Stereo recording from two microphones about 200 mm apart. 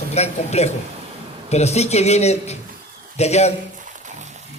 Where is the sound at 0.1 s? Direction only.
35° left (ahead or behind).